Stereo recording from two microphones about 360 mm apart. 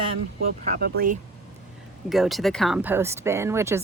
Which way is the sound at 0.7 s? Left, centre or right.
Right.